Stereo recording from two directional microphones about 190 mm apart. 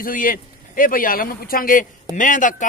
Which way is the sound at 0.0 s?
45° left (ahead or behind).